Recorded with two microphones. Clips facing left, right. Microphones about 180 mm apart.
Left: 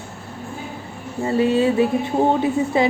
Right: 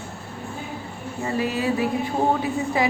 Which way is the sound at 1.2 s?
25° left (ahead or behind).